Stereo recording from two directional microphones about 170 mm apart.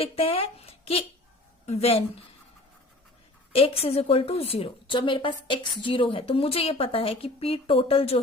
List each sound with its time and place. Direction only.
0.0 s a woman's voice: 35° left (ahead or behind)
3.5 s a woman's voice: 35° left (ahead or behind)